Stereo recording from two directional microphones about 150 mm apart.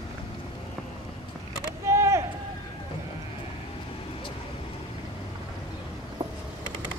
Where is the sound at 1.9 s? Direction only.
20° right (ahead or behind).